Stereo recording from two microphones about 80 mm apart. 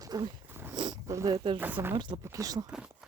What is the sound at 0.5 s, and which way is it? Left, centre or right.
Dog, right.